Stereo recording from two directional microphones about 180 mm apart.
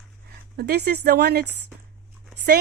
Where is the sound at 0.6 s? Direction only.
60° right (ahead or behind).